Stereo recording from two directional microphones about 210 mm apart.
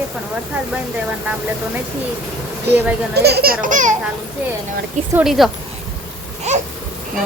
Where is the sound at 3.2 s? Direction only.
50° right (ahead or behind).